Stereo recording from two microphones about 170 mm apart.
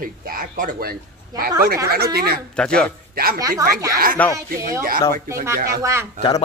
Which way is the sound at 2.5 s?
5° left (ahead or behind).